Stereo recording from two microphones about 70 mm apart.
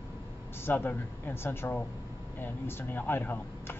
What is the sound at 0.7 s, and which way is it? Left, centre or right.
Speech, left.